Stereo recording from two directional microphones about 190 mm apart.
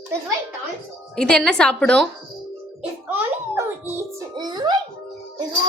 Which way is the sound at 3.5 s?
15° right (ahead or behind).